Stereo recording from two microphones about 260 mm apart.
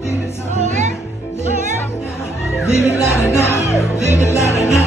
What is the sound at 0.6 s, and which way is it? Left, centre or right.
Music, right.